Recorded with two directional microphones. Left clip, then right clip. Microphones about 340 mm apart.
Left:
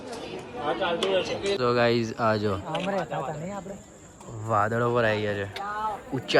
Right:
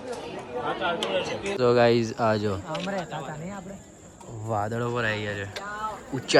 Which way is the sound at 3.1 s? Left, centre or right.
Centre.